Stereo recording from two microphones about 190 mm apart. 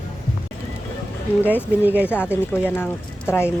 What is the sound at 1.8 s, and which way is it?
Speech, 5° right (ahead or behind).